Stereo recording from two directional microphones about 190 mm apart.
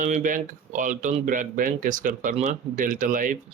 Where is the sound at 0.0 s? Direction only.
45° right (ahead or behind).